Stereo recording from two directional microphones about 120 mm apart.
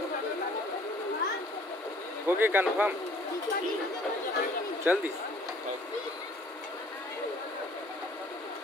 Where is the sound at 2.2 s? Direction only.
15° right (ahead or behind).